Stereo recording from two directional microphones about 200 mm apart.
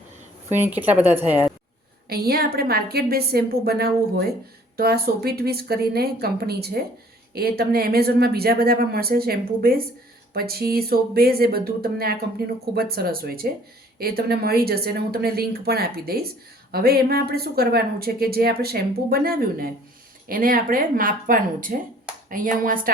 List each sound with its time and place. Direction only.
0.7 s a woman's voice: 10° right (ahead or behind)
2.0 s speech: 50° right (ahead or behind)